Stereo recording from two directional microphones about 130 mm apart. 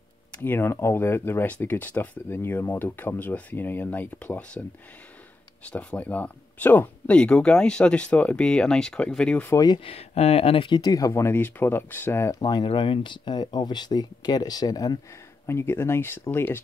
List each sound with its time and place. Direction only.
0.4 s speech: 15° left (ahead or behind)
5.7 s speech: 10° left (ahead or behind)
9.5 s speech: 30° left (ahead or behind)
9.8 s speech: 50° left (ahead or behind); by 12.4 s 20° left (ahead or behind)
12.4 s speech: 35° left (ahead or behind)
15.4 s speech: 20° left (ahead or behind)